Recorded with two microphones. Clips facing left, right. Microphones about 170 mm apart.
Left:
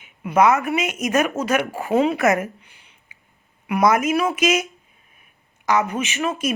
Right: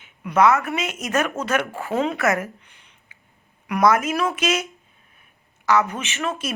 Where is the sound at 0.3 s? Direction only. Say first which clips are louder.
Left 1 dB; 15° left (ahead or behind).